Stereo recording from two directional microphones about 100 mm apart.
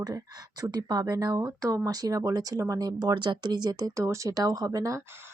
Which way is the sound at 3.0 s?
50° right (ahead or behind).